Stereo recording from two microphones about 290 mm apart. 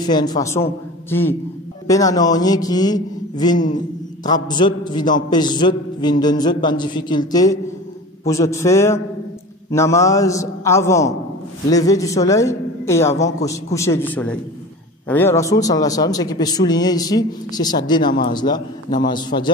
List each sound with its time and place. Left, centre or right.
0.0 s a man's voice: centre
1.9 s a man's voice: centre
13.1 s a man's voice: left
13.5 s a man's voice: centre